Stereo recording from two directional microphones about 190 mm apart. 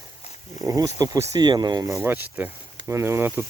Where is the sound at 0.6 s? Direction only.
20° right (ahead or behind).